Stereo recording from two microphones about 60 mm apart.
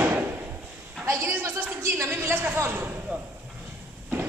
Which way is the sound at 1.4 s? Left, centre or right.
Right.